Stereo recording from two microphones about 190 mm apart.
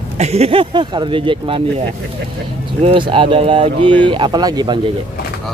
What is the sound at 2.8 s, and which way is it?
Speech, 30° right (ahead or behind).